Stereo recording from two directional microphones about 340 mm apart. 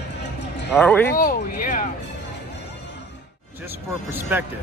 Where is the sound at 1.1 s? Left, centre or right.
Left.